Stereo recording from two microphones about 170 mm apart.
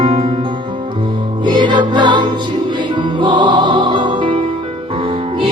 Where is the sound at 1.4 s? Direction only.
25° right (ahead or behind).